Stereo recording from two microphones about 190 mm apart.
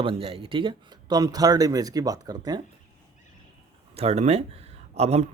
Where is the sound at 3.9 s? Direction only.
35° right (ahead or behind).